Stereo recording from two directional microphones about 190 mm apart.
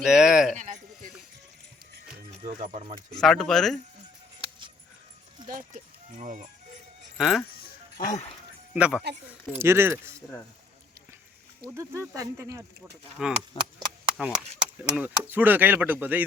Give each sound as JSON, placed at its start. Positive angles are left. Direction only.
{"t": 0.0, "sound": "speech", "side_deg": -5}
{"t": 0.5, "sound": "a sound", "side_deg": -40}
{"t": 3.2, "sound": "speech", "side_deg": 0}
{"t": 5.5, "sound": "speech", "side_deg": -40}
{"t": 7.2, "sound": "speech", "side_deg": 0}
{"t": 7.9, "sound": "speech", "side_deg": 40}
{"t": 8.7, "sound": "speech", "side_deg": -5}
{"t": 11.7, "sound": "speech", "side_deg": -15}
{"t": 13.2, "sound": "speech", "side_deg": -5}
{"t": 13.5, "sound": "speech", "side_deg": 25}
{"t": 14.2, "sound": "speech", "side_deg": -5}